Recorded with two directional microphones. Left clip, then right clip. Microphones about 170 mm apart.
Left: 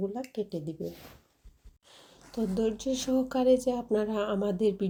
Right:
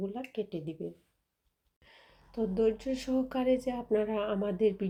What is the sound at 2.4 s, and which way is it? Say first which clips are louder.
Speech: right 1 dB; 40° left (ahead or behind).